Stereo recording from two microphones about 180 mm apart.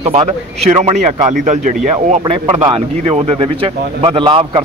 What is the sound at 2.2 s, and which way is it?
Speech, 25° right (ahead or behind).